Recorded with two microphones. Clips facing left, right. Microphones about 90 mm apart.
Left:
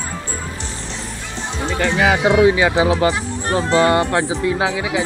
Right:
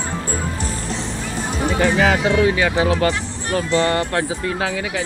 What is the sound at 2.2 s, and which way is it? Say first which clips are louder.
Speech: left 3 dB; 20° left (ahead or behind).